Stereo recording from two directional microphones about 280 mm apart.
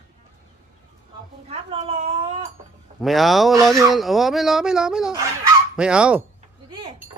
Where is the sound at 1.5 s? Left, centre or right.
Centre.